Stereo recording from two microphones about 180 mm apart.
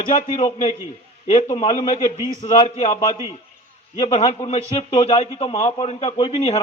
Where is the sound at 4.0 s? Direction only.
35° left (ahead or behind).